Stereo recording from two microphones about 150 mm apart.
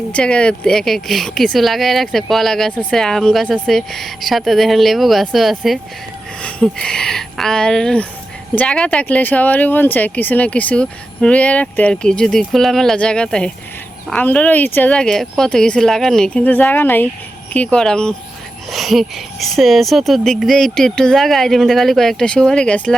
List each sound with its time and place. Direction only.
0.1 s speech: 5° left (ahead or behind)